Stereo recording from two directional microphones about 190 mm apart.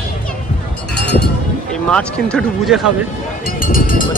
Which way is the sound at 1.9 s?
5° left (ahead or behind).